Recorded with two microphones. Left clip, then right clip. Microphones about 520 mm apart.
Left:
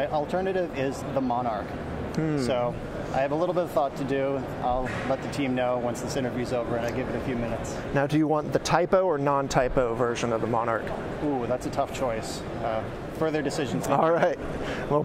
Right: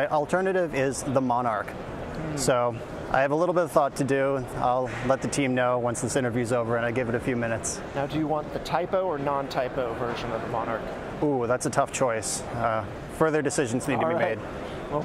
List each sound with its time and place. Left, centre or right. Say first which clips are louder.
0.0 s speech: right 2 dB; right
8.0 s speech: left 3 dB; left
11.5 s speech: right 3 dB; right
13.9 s speech: left 4 dB; left